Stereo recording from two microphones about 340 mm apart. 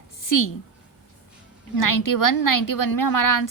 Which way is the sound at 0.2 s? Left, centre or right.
Left.